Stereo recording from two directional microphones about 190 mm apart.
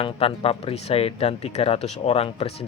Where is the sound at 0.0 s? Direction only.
30° left (ahead or behind).